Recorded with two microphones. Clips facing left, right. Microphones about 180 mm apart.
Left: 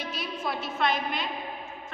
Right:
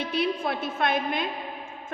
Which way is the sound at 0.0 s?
60° right (ahead or behind).